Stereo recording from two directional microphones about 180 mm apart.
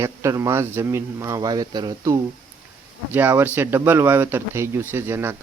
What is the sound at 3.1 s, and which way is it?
Speech, 10° right (ahead or behind).